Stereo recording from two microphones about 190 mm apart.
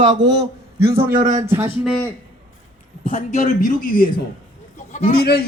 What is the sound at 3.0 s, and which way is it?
A man's voice, 40° left (ahead or behind).